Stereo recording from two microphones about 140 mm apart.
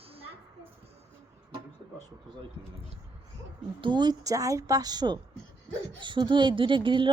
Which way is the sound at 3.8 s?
35° right (ahead or behind).